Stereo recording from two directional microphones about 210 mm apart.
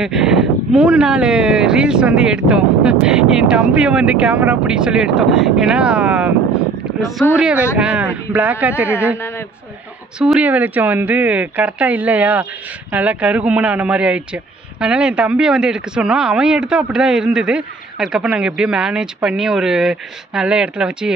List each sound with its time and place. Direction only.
0.0 s a man's voice: centre (ahead or behind)
7.3 s a man's voice: 5° right (ahead or behind)
10.1 s a man's voice: 5° right (ahead or behind)